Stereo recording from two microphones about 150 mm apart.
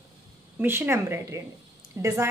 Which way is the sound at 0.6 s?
15° right (ahead or behind).